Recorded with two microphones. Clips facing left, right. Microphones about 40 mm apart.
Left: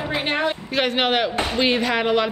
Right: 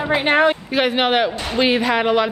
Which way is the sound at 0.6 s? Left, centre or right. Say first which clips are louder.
Right 3 dB; centre.